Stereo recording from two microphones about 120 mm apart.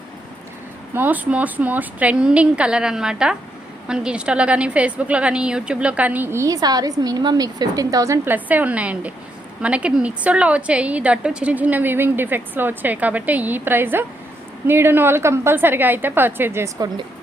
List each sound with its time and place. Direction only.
0.9 s a woman's voice: 15° right (ahead or behind)